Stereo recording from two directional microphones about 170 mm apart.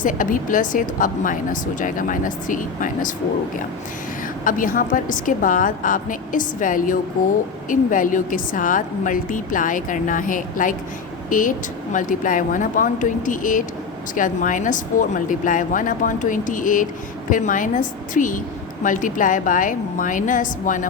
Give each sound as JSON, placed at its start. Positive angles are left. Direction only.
{"t": 0.0, "sound": "a woman's voice", "side_deg": 50}
{"t": 4.4, "sound": "a woman's voice", "side_deg": 55}